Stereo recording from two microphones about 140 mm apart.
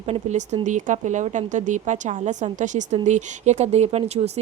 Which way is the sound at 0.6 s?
65° right (ahead or behind).